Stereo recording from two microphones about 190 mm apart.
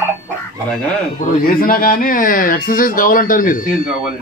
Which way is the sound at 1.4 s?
50° left (ahead or behind).